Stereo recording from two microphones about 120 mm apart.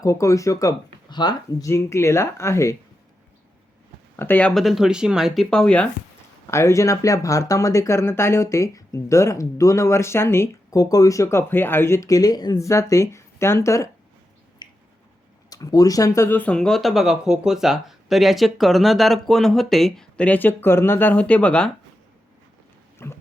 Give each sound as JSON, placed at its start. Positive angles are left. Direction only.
{"t": 0.0, "sound": "speech", "side_deg": 25}
{"t": 4.2, "sound": "speech", "side_deg": 15}
{"t": 4.5, "sound": "speech", "side_deg": 0}
{"t": 6.5, "sound": "speech", "side_deg": 25}
{"t": 14.6, "sound": "finger snapping", "side_deg": 35}
{"t": 15.4, "sound": "speech", "side_deg": 30}
{"t": 23.0, "sound": "speech", "side_deg": 20}